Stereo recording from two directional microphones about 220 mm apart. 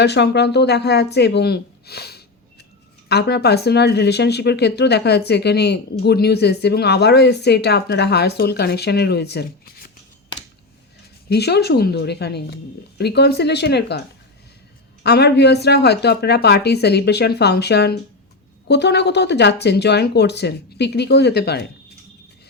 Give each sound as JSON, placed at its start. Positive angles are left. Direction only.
{"t": 0.0, "sound": "speech", "side_deg": 50}
{"t": 11.3, "sound": "speech", "side_deg": 50}
{"t": 15.0, "sound": "speech", "side_deg": 50}